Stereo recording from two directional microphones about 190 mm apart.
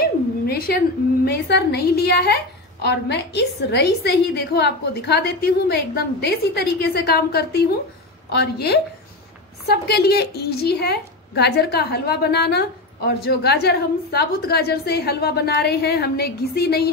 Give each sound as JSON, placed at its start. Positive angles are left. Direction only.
{"t": 0.5, "sound": "a woman's voice", "side_deg": 55}